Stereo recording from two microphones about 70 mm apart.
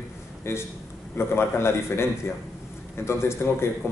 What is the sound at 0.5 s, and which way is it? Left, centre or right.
Speech, left.